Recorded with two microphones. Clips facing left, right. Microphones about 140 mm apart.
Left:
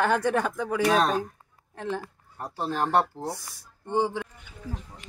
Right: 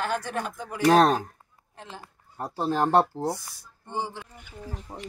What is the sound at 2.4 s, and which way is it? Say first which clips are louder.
Speech: right 3 dB; 20° right (ahead or behind).